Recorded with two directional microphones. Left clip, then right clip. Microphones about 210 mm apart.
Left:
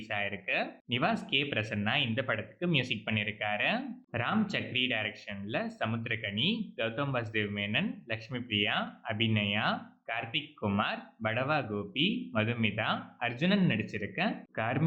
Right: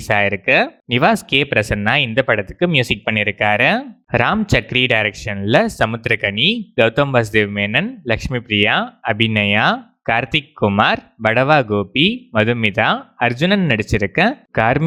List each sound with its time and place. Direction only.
0.1 s speech: 50° right (ahead or behind)